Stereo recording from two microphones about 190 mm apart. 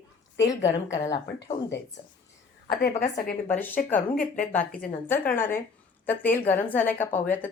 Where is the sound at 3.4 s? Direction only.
10° left (ahead or behind).